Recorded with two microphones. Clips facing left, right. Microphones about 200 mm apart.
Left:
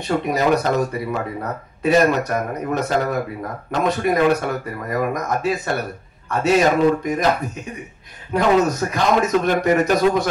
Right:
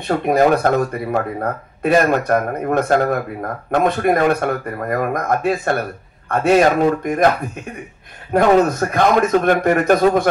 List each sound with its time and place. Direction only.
0.1 s speech: 55° right (ahead or behind)
8.3 s a man's voice: 55° right (ahead or behind)